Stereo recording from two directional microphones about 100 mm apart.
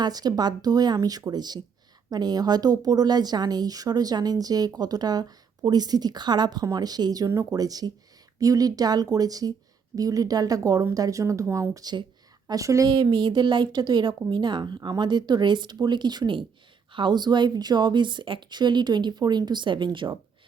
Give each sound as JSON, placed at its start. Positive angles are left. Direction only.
{"t": 0.0, "sound": "speech", "side_deg": -40}
{"t": 11.7, "sound": "speech", "side_deg": -40}
{"t": 12.9, "sound": "a woman's voice", "side_deg": -45}